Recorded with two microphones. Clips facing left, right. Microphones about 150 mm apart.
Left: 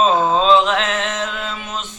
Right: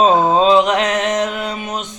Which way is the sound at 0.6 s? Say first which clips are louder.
Right 4 dB; 15° right (ahead or behind).